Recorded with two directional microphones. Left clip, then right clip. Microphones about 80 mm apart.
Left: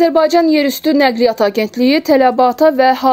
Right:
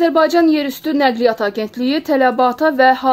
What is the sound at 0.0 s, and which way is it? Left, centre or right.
A woman's voice, left.